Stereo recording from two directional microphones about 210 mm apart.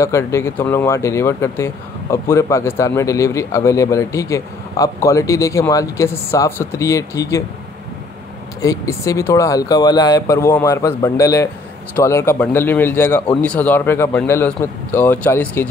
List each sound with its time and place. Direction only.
0.0 s speech: 15° left (ahead or behind)
8.5 s speech: 15° left (ahead or behind)